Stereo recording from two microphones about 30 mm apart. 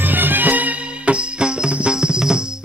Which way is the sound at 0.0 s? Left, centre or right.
Right.